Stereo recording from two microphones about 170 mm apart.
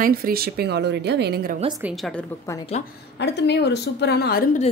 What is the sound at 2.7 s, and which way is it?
Speech, 40° left (ahead or behind).